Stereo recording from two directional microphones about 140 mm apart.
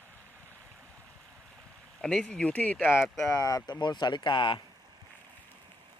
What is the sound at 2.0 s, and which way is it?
Speech, 5° left (ahead or behind).